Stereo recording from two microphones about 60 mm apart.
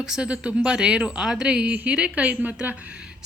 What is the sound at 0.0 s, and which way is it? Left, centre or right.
Speech, centre.